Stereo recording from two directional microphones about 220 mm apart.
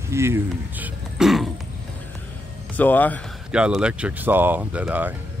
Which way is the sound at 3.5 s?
5° right (ahead or behind).